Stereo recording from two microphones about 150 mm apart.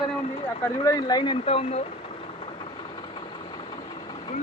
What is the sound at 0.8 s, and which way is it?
Speech, 25° left (ahead or behind).